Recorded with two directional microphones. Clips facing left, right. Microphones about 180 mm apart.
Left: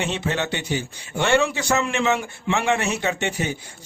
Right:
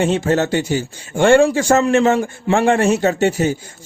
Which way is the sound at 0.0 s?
45° right (ahead or behind).